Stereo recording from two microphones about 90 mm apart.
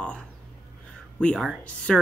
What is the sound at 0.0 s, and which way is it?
Speech, 10° left (ahead or behind).